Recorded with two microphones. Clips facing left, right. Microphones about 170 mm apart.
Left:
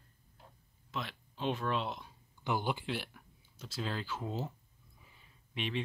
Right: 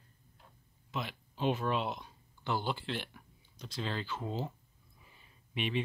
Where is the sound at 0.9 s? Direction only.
5° right (ahead or behind).